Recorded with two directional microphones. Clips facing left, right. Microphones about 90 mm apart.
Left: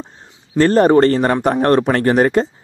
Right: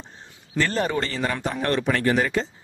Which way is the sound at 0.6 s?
45° left (ahead or behind).